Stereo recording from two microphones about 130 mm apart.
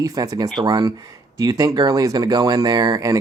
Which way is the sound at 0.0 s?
25° right (ahead or behind).